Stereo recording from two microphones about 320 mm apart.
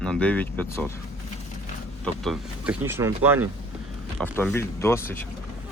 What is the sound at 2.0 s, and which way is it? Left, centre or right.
Speech, centre.